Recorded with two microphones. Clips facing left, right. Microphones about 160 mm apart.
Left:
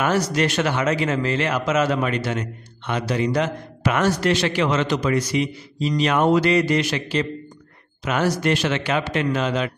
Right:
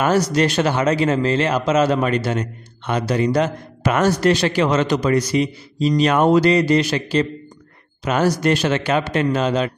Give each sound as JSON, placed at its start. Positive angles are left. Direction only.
{"t": 0.0, "sound": "a man's voice", "side_deg": -35}